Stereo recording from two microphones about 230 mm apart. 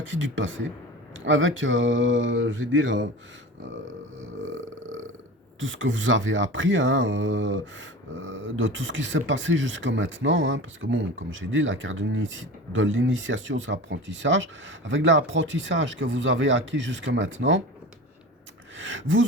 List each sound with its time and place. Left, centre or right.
0.0 s speech: right
4.4 s burping: right
5.5 s speech: right
18.8 s speech: right